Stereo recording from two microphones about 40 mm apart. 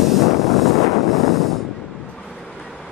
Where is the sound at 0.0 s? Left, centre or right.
Centre.